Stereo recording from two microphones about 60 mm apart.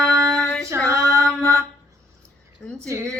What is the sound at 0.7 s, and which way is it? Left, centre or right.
Female singing, right.